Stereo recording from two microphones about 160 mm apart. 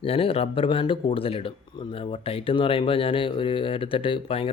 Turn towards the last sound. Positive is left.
turn(degrees=35)  # may be behind; listen again after turning